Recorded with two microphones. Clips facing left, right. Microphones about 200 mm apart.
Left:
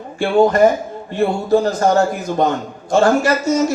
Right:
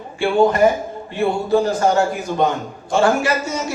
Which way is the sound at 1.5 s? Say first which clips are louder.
Left 2 dB; 40° left (ahead or behind).